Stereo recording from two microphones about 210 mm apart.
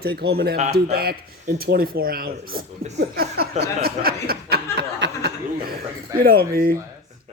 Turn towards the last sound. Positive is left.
turn(degrees=-45)  # may be behind; listen again after turning